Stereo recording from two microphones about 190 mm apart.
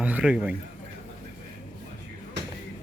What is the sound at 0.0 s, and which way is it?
Speech, 5° right (ahead or behind).